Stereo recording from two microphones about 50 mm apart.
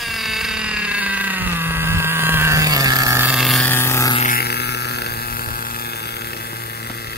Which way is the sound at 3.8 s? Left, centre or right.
Left.